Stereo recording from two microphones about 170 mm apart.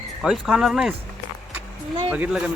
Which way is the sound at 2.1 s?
10° right (ahead or behind).